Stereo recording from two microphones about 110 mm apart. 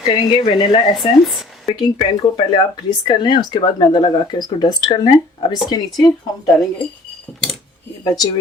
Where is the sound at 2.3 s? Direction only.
45° left (ahead or behind).